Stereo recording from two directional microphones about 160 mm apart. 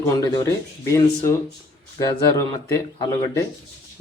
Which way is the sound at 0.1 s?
20° left (ahead or behind).